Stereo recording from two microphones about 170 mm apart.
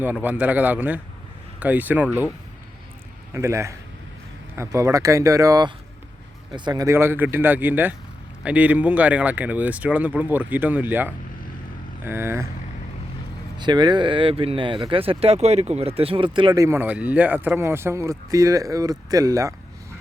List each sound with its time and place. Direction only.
0.0 s speech: 10° right (ahead or behind)
3.3 s speech: 15° right (ahead or behind)
13.6 s speech: 25° right (ahead or behind)